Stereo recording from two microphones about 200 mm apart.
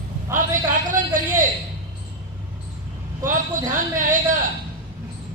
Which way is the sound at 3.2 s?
40° right (ahead or behind).